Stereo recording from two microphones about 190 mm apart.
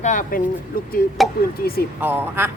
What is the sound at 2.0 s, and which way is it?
Speech, 10° right (ahead or behind).